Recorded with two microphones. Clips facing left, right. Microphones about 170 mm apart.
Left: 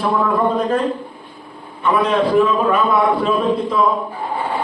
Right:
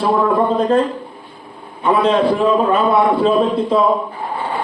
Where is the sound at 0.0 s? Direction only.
30° right (ahead or behind).